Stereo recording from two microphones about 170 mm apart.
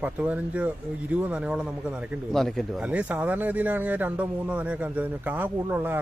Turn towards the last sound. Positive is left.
turn(degrees=-10)  # may be behind; listen again after turning